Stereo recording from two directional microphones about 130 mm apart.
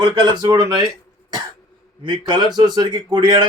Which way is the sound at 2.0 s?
35° right (ahead or behind).